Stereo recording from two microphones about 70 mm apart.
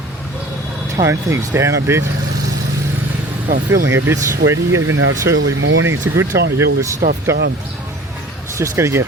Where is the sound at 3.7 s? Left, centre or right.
Right.